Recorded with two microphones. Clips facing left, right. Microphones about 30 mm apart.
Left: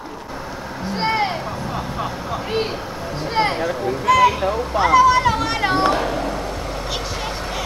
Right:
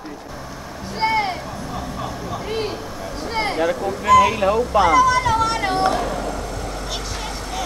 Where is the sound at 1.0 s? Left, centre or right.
Centre.